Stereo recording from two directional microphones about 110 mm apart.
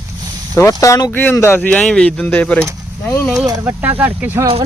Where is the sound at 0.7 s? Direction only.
30° left (ahead or behind).